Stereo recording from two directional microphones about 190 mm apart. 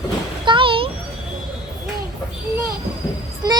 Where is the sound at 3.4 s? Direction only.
20° right (ahead or behind).